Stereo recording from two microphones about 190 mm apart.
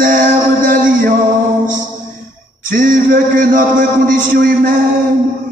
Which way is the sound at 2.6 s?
45° right (ahead or behind).